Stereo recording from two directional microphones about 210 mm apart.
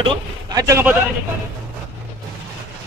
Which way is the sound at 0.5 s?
15° right (ahead or behind).